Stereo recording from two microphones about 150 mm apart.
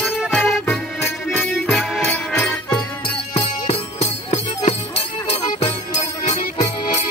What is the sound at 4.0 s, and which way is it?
Music, 45° left (ahead or behind).